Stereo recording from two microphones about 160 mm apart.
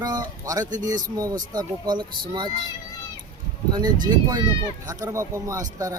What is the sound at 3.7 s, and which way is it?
Speech, 25° right (ahead or behind).